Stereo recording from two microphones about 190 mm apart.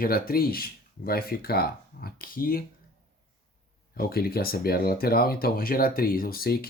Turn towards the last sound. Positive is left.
turn(degrees=55)  # may be behind; listen again after turning